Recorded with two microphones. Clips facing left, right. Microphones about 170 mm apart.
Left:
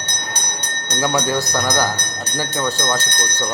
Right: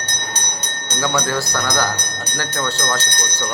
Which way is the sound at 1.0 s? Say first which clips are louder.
Left 1 dB; 15° left (ahead or behind).